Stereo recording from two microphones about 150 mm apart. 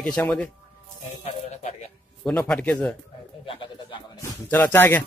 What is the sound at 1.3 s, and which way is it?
Speech, 45° left (ahead or behind).